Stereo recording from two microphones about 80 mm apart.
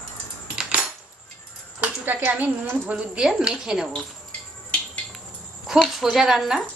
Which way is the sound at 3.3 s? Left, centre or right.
Centre.